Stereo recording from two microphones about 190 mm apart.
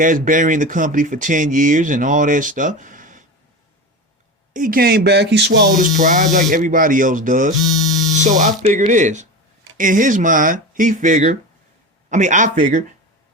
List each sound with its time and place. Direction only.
0.0 s speech: 45° right (ahead or behind)
4.5 s speech: 45° right (ahead or behind); by 5.6 s 60° right (ahead or behind)
5.7 s speech: 45° right (ahead or behind)